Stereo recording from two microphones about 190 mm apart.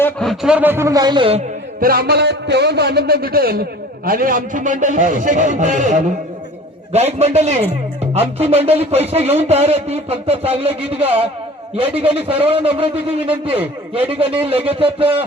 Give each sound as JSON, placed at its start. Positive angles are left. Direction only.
{"t": 0.0, "sound": "a man's voice", "side_deg": 0}
{"t": 1.8, "sound": "a man's voice", "side_deg": -55}
{"t": 12.5, "sound": "speech", "side_deg": -30}